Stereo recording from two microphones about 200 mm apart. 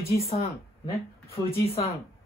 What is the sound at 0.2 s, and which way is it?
A woman's voice, 30° left (ahead or behind).